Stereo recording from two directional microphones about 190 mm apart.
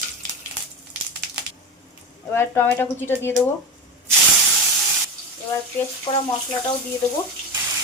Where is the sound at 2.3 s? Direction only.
10° left (ahead or behind).